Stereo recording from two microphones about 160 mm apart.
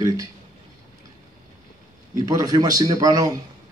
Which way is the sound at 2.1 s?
20° right (ahead or behind).